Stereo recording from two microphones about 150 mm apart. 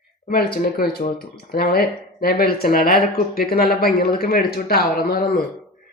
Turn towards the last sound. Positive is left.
turn(degrees=90)